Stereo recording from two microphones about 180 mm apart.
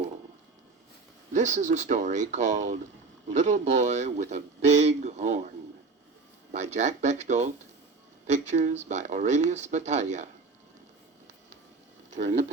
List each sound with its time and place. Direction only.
1.3 s speech: 40° right (ahead or behind)
6.5 s speech: 40° right (ahead or behind)